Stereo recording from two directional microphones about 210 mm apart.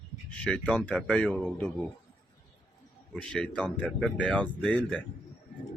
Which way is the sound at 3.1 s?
Centre (ahead or behind).